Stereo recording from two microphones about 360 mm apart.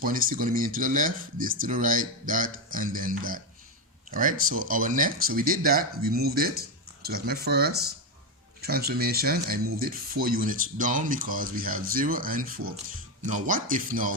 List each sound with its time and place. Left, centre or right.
0.0 s speech: right